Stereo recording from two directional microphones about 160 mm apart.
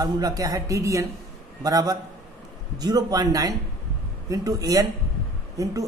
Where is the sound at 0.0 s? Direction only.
25° right (ahead or behind).